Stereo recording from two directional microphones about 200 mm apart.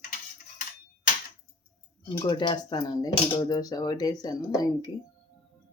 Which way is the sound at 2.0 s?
25° left (ahead or behind).